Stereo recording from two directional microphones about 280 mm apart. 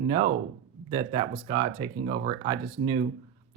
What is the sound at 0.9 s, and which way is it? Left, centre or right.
Speech, centre.